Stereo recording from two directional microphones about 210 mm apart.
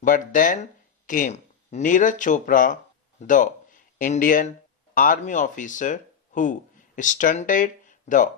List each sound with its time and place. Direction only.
0.0 s speech: 40° left (ahead or behind)